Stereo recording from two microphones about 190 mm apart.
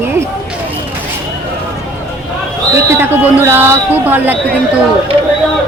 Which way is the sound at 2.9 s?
10° right (ahead or behind).